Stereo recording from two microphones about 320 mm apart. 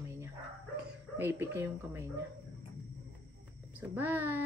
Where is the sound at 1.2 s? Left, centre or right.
Centre.